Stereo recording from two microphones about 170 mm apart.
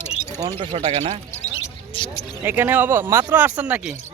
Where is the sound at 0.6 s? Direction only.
35° right (ahead or behind).